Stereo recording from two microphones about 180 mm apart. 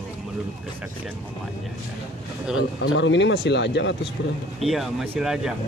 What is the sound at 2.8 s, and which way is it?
Speech, 80° left.